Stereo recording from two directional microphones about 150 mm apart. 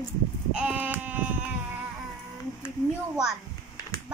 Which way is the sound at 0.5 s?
10° right (ahead or behind).